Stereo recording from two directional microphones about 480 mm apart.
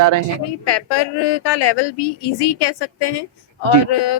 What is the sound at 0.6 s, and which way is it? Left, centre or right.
Speech, left.